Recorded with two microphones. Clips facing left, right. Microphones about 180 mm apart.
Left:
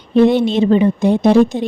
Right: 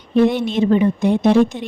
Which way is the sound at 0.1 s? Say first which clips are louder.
Left 4 dB; 30° left (ahead or behind).